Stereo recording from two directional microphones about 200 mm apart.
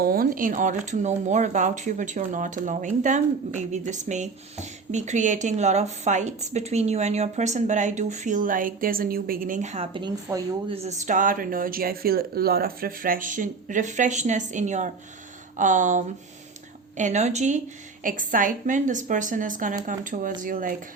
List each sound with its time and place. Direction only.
0.0 s speech: 45° right (ahead or behind); by 10.6 s 15° right (ahead or behind)
10.7 s speech: 30° right (ahead or behind)